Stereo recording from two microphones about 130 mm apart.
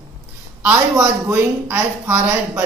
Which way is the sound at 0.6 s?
15° right (ahead or behind).